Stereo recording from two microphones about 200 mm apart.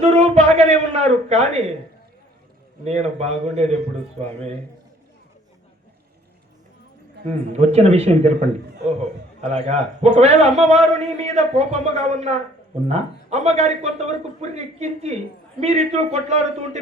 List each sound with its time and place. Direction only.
0.0 s a sound: 35° right (ahead or behind)
2.8 s a man's voice: 35° right (ahead or behind)
7.3 s a man's voice: 35° right (ahead or behind)
9.6 s a man's voice: 30° right (ahead or behind)